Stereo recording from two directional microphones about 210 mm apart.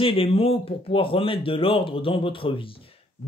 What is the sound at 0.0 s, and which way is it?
Speech, 25° left (ahead or behind).